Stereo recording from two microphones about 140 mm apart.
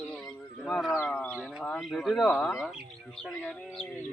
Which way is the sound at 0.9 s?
20° left (ahead or behind).